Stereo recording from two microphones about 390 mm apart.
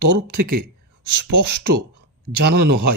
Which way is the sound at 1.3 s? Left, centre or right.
Right.